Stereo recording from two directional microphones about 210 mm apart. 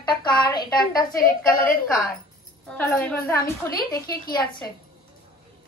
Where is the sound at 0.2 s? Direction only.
20° left (ahead or behind).